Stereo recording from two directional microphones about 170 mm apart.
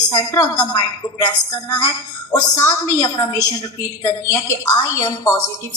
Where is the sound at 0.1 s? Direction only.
20° left (ahead or behind).